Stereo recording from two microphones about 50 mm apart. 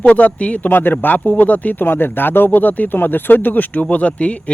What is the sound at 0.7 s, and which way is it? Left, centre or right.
Speech, left.